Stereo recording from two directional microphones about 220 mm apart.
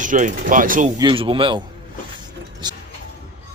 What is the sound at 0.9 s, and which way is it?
Speech, 20° right (ahead or behind).